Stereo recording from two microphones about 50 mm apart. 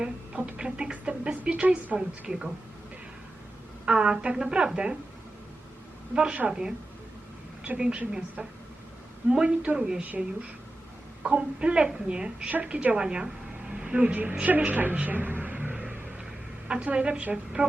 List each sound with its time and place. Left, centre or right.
0.0 s a woman's voice: right
2.0 s a woman's voice: centre
3.8 s a woman's voice: centre
6.1 s a woman's voice: centre
7.8 s a woman's voice: centre
11.2 s a woman's voice: right
14.9 s a sound: right
16.6 s a woman's voice: right